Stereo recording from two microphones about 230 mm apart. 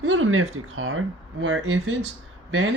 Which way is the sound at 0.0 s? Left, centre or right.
Right.